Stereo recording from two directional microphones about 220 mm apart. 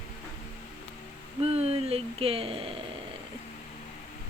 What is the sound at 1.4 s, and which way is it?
Speech, 25° right (ahead or behind).